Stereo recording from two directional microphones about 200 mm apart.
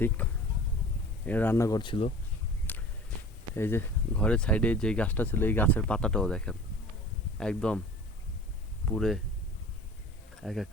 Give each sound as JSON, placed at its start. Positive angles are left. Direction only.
{"t": 0.2, "sound": "a sound", "side_deg": 10}
{"t": 1.3, "sound": "speech", "side_deg": 10}
{"t": 3.5, "sound": "speech", "side_deg": 10}
{"t": 8.9, "sound": "speech", "side_deg": 0}
{"t": 10.4, "sound": "speech", "side_deg": 0}